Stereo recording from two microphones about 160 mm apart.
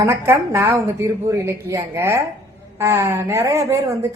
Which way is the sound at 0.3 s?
15° right (ahead or behind).